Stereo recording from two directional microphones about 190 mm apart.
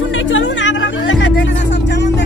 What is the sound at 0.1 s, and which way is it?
Music, 90° left.